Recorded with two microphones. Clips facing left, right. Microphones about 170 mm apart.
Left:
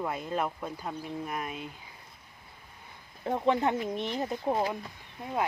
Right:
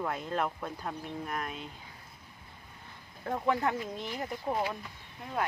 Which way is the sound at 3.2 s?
20° left (ahead or behind).